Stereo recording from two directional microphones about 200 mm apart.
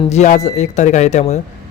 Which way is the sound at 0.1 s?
35° left (ahead or behind).